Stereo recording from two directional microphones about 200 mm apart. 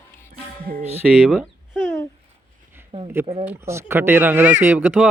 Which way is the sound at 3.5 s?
15° right (ahead or behind).